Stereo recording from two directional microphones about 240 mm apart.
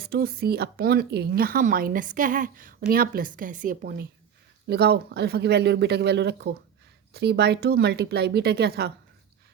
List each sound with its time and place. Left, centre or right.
0.0 s a woman's voice: right